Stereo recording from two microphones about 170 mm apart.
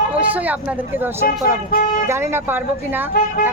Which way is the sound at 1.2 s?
60° left (ahead or behind).